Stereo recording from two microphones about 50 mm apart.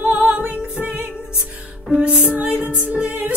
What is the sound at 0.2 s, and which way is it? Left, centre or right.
Music, right.